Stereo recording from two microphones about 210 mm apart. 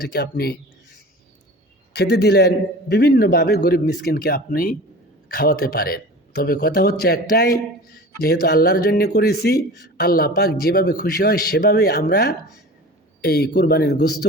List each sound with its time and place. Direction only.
0.0 s speech: 50° left (ahead or behind)